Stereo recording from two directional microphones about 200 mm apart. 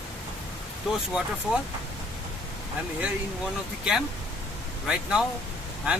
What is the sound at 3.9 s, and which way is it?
Speech, 5° right (ahead or behind).